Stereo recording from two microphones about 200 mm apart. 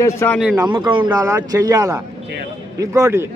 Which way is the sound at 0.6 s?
20° right (ahead or behind).